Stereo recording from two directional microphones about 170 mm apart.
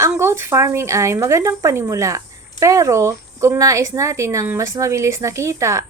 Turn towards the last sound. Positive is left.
turn(degrees=-15)  # may be behind; listen again after turning